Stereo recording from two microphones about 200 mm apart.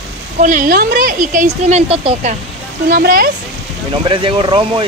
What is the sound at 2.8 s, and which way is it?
Speech, 50° right (ahead or behind).